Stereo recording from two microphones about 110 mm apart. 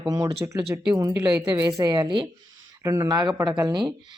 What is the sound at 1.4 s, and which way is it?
Speech, 35° right (ahead or behind).